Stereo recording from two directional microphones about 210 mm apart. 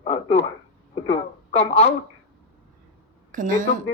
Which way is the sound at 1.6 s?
35° left (ahead or behind).